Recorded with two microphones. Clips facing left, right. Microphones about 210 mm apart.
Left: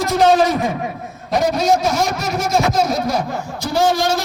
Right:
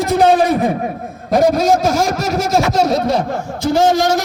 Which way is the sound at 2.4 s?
80° right.